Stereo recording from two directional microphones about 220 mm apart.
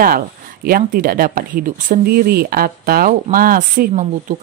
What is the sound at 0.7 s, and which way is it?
Speech, 40° right (ahead or behind).